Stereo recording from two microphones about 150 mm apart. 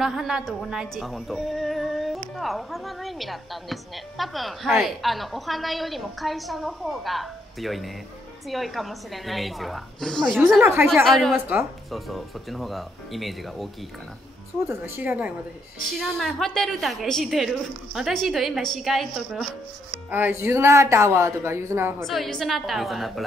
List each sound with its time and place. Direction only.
0.0 s a woman's voice: 5° right (ahead or behind)
11.1 s a woman's voice: centre (ahead or behind)
11.3 s speech: 10° right (ahead or behind)
11.9 s a woman's voice: centre (ahead or behind)
14.7 s speech: 10° right (ahead or behind)
16.0 s a woman's voice: centre (ahead or behind)
20.1 s speech: 15° right (ahead or behind)
22.0 s a woman's voice: centre (ahead or behind)